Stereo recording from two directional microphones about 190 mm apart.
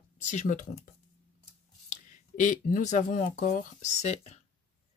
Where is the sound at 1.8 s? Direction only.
40° left (ahead or behind).